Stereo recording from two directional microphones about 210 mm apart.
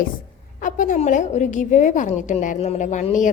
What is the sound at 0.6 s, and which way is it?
A woman's voice, 40° left (ahead or behind).